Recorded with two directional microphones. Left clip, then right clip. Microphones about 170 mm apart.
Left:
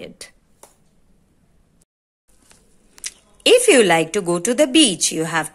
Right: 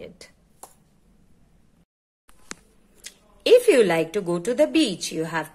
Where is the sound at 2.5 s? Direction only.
70° right (ahead or behind).